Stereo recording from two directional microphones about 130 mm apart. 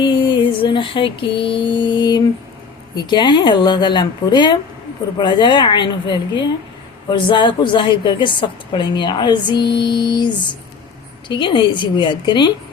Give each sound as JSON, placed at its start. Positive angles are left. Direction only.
{"t": 0.0, "sound": "music", "side_deg": 40}
{"t": 2.9, "sound": "a woman's voice", "side_deg": 35}